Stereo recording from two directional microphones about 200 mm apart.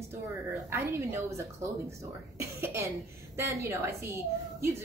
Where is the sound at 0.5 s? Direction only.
15° right (ahead or behind).